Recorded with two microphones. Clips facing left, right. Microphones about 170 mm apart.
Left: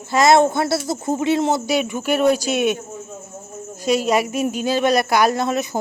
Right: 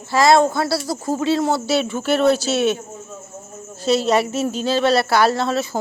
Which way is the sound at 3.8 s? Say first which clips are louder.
Right 1 dB; 10° left (ahead or behind).